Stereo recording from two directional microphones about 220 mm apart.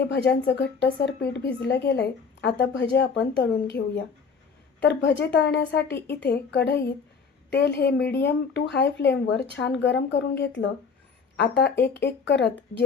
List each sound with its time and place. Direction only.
0.0 s speech: 50° left (ahead or behind)